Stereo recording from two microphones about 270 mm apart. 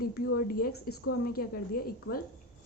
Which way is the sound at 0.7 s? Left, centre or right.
Left.